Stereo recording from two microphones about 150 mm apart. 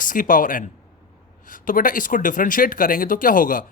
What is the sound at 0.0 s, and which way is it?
Speech, 65° left (ahead or behind).